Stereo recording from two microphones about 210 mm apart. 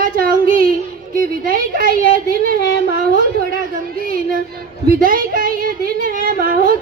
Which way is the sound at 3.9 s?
45° right (ahead or behind).